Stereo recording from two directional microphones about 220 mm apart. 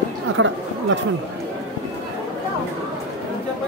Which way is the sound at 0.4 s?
60° right (ahead or behind).